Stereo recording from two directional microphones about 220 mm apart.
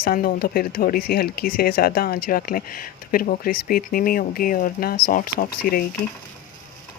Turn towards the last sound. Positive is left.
turn(degrees=40)  # may be behind; listen again after turning